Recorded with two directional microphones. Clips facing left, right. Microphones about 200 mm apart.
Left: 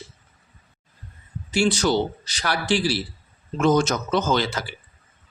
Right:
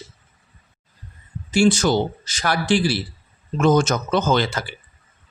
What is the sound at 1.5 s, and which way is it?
Speech, 50° right (ahead or behind).